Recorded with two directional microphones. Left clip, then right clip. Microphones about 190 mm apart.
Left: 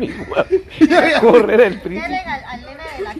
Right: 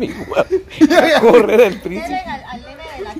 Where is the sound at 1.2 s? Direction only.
5° right (ahead or behind).